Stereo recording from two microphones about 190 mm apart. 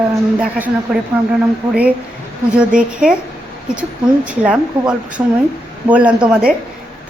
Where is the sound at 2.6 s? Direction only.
5° right (ahead or behind).